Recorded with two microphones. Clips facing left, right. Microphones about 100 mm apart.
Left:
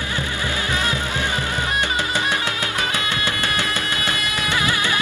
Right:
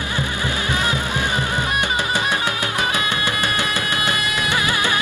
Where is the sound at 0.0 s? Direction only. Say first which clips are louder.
Right 2 dB; 20° right (ahead or behind).